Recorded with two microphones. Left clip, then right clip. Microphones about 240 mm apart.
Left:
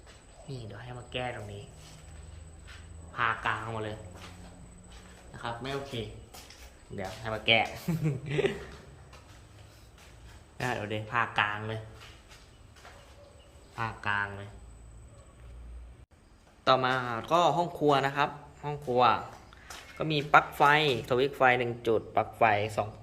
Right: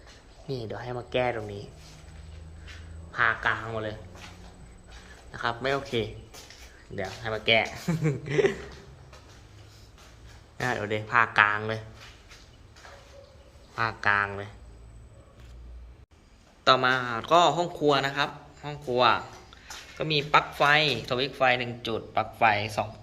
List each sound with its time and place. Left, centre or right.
0.4 s speech: centre
3.2 s speech: centre
5.3 s a man's voice: centre
6.9 s speech: centre
10.6 s speech: centre
13.7 s a man's voice: centre
16.6 s a man's voice: centre